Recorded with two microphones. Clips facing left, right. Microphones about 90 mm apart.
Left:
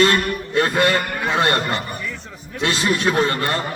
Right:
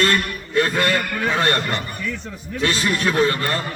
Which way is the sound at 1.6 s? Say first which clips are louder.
Left 1 dB; 5° left (ahead or behind).